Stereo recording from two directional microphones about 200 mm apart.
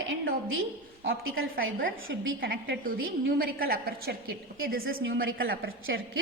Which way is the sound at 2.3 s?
45° right (ahead or behind).